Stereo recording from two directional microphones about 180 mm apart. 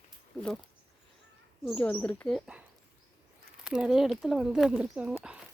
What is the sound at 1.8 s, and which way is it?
Speech, 5° left (ahead or behind).